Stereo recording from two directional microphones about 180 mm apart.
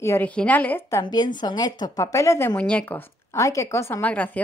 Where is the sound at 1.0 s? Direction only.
25° left (ahead or behind); by 4.4 s 10° left (ahead or behind).